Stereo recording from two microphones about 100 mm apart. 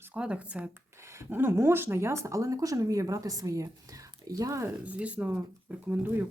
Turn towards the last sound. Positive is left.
turn(degrees=-20)  # may be behind; listen again after turning